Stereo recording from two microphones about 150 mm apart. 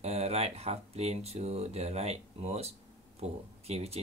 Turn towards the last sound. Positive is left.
turn(degrees=-45)  # may be behind; listen again after turning